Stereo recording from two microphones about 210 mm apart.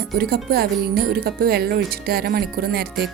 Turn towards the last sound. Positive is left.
turn(degrees=-45)  # may be behind; listen again after turning